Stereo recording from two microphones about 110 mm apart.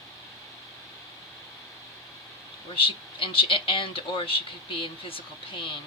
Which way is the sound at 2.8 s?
55° left (ahead or behind).